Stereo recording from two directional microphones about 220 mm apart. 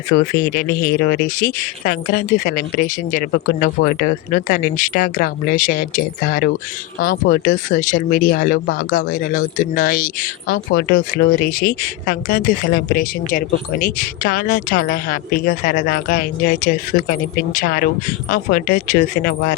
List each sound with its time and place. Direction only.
0.1 s speech: 40° left (ahead or behind)